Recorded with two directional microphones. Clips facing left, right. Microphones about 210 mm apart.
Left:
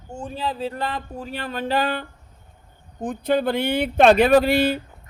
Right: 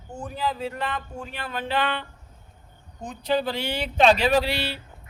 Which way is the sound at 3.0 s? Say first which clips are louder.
Left 4 dB; 55° left (ahead or behind).